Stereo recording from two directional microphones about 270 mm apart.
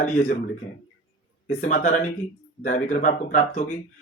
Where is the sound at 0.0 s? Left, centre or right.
Left.